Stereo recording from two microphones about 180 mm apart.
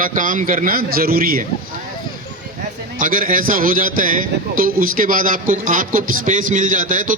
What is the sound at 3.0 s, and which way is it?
A man's voice, 50° right (ahead or behind).